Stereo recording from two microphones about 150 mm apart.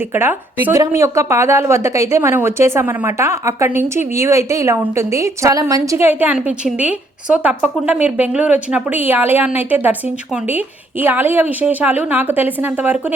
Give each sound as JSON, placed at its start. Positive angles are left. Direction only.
{"t": 0.1, "sound": "a woman's voice", "side_deg": -15}
{"t": 11.0, "sound": "a woman's voice", "side_deg": -15}